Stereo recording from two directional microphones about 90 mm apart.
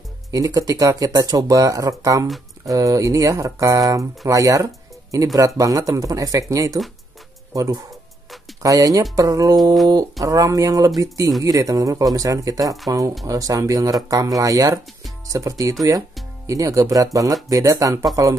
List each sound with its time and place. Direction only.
0.3 s speech: 40° right (ahead or behind)